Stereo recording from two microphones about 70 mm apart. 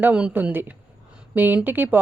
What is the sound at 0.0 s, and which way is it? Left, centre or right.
Speech, right.